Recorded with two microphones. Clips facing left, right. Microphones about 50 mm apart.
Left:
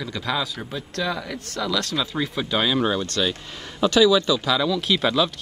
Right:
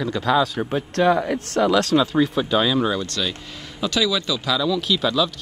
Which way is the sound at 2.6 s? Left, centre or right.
Left.